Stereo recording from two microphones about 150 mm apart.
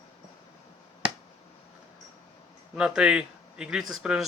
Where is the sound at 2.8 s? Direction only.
5° right (ahead or behind).